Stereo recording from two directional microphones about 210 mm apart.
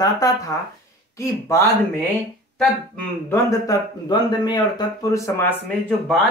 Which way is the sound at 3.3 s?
15° left (ahead or behind).